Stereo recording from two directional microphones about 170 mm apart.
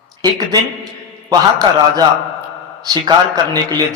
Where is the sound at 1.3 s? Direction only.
20° right (ahead or behind).